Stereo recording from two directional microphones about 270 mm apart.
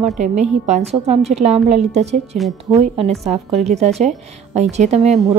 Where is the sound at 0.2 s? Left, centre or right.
Right.